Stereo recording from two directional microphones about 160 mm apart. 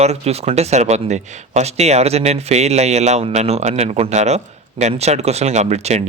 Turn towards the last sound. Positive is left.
turn(degrees=-45)  # may be behind; listen again after turning